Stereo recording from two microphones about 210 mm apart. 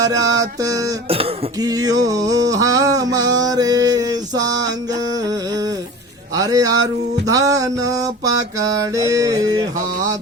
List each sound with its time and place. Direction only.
0.0 s mantra: 15° right (ahead or behind)
1.0 s throat clearing: 25° right (ahead or behind)
2.0 s a sound: 15° right (ahead or behind)
6.3 s speech: 15° right (ahead or behind)
7.3 s mantra: 15° right (ahead or behind)